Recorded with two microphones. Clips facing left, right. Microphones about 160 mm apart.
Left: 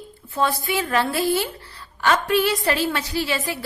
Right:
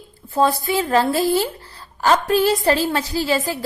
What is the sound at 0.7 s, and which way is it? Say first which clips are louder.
A woman's voice: right 4 dB; 35° right (ahead or behind).